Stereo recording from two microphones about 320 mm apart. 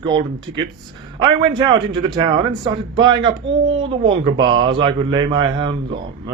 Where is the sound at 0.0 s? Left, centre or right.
Centre.